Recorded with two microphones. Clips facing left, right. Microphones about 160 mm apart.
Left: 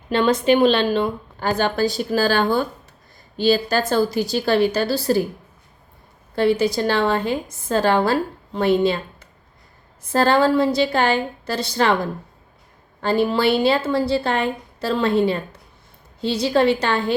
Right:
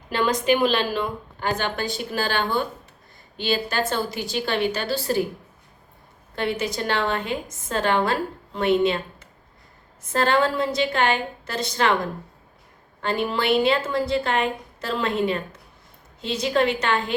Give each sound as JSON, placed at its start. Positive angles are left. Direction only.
{"t": 0.1, "sound": "a woman's voice", "side_deg": 30}
{"t": 6.3, "sound": "a woman's voice", "side_deg": 35}
{"t": 10.0, "sound": "a woman's voice", "side_deg": 35}
{"t": 13.0, "sound": "a woman's voice", "side_deg": 35}